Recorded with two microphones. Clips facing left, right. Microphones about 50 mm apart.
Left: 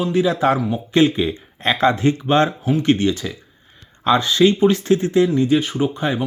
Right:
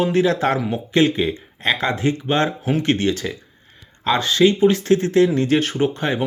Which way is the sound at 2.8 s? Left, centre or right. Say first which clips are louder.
Left 3 dB; right.